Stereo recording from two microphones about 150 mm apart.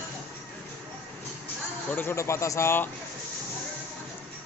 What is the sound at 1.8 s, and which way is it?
Speech, 15° left (ahead or behind).